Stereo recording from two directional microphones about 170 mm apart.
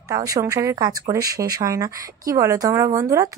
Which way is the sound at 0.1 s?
20° right (ahead or behind).